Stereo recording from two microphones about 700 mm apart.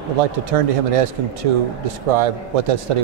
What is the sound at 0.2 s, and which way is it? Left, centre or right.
Speech, right.